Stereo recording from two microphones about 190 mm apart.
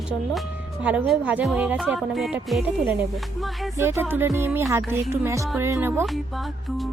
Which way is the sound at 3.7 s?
15° right (ahead or behind).